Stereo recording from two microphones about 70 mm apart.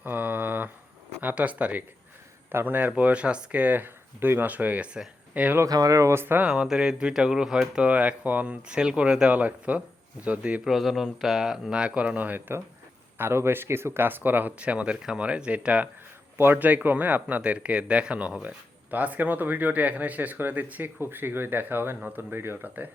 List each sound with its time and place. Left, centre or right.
0.0 s a sound: right
1.2 s speech: right
5.6 s speech: right
6.4 s speech: centre
10.6 s speech: centre; by 12.5 s right
13.1 s speech: right